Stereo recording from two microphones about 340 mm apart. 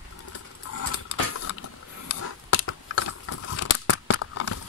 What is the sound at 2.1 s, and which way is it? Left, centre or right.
Biting, left.